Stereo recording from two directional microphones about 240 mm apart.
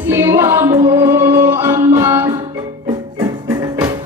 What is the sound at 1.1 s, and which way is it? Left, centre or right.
Music, centre.